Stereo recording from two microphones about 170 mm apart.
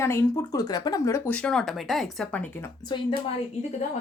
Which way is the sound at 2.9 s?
30° left (ahead or behind).